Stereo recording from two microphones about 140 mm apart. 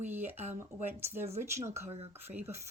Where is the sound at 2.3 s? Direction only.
15° right (ahead or behind).